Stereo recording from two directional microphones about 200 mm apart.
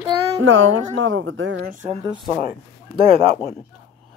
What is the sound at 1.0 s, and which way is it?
Speech, 75° right (ahead or behind).